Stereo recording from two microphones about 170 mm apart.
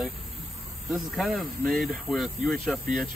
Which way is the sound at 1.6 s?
60° right (ahead or behind).